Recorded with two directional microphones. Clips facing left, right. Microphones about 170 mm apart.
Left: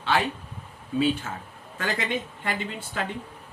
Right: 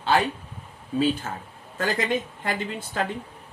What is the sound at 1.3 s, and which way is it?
Speech, 40° right (ahead or behind).